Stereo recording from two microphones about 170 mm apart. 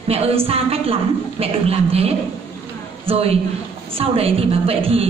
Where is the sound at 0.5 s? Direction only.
35° right (ahead or behind).